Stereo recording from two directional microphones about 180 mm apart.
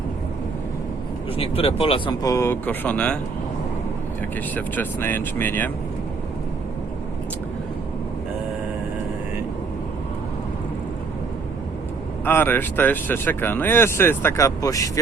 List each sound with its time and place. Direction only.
1.4 s speech: 30° left (ahead or behind)
2.2 s speech: 15° left (ahead or behind)
4.5 s speech: 10° left (ahead or behind)
12.2 s speech: 10° left (ahead or behind)